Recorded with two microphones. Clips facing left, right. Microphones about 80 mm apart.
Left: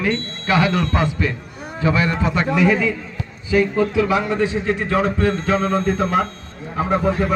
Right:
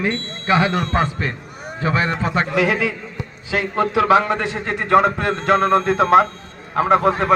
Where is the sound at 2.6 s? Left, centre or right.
Right.